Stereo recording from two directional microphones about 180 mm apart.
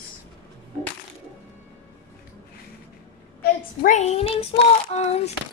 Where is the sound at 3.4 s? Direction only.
40° left (ahead or behind).